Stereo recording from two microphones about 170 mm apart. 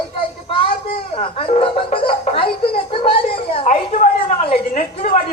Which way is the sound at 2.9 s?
35° left (ahead or behind).